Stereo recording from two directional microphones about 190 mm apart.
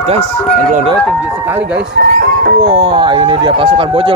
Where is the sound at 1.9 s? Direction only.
55° right (ahead or behind).